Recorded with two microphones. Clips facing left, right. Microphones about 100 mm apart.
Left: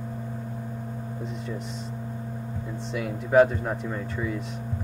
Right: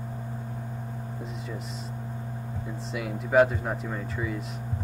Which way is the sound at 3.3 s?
5° right (ahead or behind).